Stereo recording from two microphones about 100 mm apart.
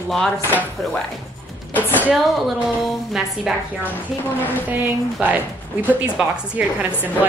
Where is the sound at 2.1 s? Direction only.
Centre (ahead or behind).